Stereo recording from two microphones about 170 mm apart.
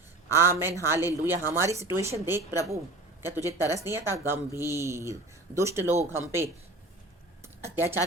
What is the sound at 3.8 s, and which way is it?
Speech, 15° right (ahead or behind).